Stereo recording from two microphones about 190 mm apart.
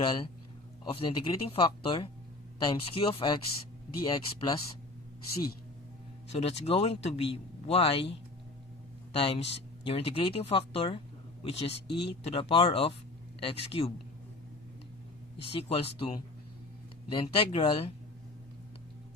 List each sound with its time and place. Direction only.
0.9 s speech: 25° left (ahead or behind)
6.3 s a man's voice: 35° left (ahead or behind)
9.1 s a man's voice: 30° left (ahead or behind)
15.5 s a man's voice: 30° left (ahead or behind)